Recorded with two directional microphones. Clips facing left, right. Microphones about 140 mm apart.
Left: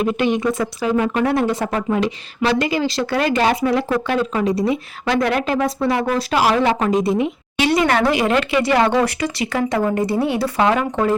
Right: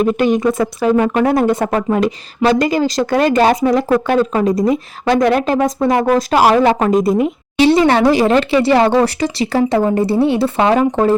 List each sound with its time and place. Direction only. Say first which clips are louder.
0.0 s speech: right 5 dB; 45° right (ahead or behind)
7.6 s speech: right 6 dB; 30° right (ahead or behind)